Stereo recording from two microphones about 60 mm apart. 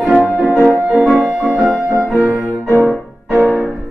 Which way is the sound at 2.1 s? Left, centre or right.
Right.